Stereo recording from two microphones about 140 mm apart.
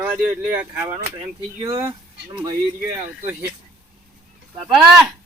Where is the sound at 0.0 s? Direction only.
10° right (ahead or behind).